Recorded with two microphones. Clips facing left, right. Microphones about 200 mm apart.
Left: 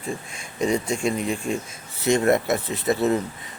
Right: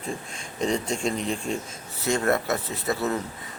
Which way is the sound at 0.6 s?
10° left (ahead or behind).